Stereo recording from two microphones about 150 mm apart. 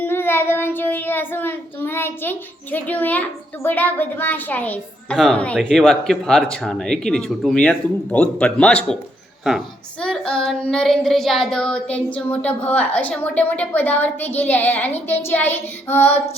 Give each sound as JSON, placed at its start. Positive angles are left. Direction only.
{"t": 0.0, "sound": "speech", "side_deg": 15}